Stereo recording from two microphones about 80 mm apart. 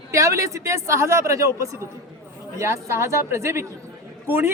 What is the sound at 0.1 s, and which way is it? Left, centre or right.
A man's voice, right.